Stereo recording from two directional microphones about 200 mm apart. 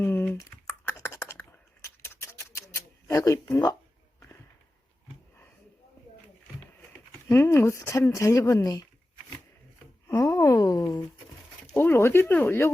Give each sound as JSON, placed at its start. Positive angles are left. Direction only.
{"t": 0.0, "sound": "computer keyboard", "side_deg": 10}
{"t": 0.7, "sound": "typing", "side_deg": 15}
{"t": 7.3, "sound": "speech", "side_deg": 15}
{"t": 10.1, "sound": "speech", "side_deg": 15}